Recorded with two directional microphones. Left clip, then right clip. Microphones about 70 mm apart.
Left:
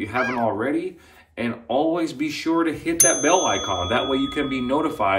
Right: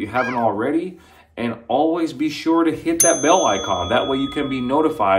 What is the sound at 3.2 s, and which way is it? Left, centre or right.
Speech, right.